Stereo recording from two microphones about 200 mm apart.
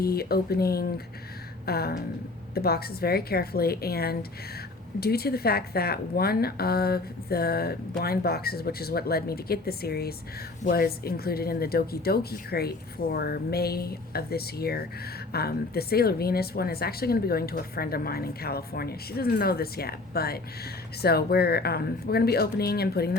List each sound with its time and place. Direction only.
0.0 s a woman's voice: 50° left (ahead or behind)